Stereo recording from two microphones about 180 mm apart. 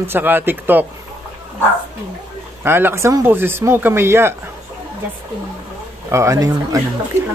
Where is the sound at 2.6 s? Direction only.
10° right (ahead or behind).